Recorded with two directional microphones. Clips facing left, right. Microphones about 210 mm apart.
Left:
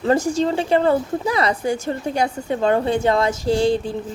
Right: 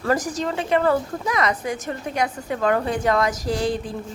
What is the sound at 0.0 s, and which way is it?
Speech, 25° left (ahead or behind).